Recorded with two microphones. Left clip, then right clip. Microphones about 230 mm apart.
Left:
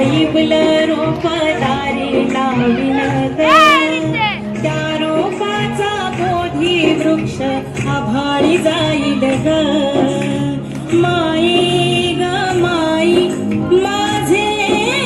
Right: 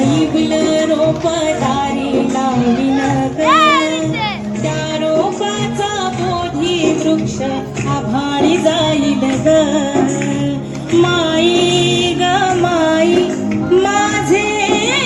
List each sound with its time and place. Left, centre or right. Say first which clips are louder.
0.1 s music: left 2 dB; centre
3.4 s music: left 2 dB; centre
11.3 s music: right 2 dB; left